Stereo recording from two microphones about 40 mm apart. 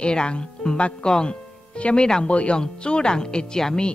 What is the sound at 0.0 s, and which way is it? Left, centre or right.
Speech, left.